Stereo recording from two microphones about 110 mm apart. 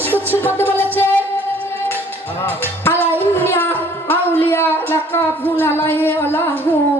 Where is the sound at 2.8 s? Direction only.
20° left (ahead or behind).